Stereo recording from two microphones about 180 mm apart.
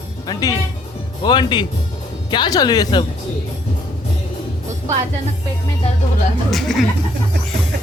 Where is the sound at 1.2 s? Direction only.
25° left (ahead or behind).